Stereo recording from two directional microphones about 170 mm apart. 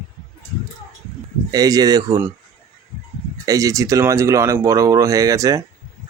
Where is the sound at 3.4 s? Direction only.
20° right (ahead or behind).